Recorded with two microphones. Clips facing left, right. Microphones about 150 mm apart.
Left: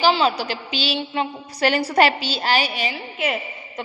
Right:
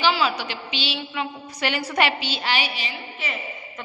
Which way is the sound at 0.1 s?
30° left (ahead or behind).